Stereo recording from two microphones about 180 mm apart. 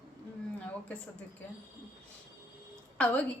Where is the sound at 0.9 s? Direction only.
10° left (ahead or behind).